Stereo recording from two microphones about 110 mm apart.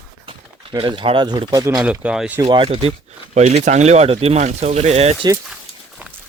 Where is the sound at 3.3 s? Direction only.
80° right.